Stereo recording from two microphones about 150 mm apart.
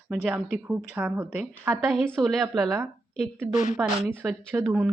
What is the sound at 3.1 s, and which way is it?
Speech, 55° left (ahead or behind).